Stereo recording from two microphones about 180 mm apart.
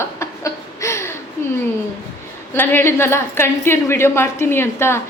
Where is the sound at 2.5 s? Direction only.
15° left (ahead or behind).